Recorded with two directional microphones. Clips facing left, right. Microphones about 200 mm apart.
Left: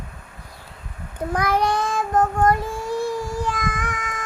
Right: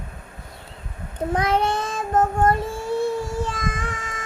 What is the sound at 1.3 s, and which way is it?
Child singing, 25° right (ahead or behind).